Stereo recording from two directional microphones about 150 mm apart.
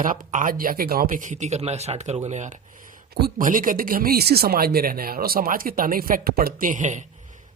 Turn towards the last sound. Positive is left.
turn(degrees=-55)  # may be behind; listen again after turning